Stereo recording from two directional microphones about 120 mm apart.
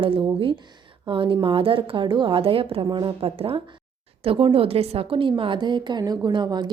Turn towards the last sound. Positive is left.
turn(degrees=-40)  # may be behind; listen again after turning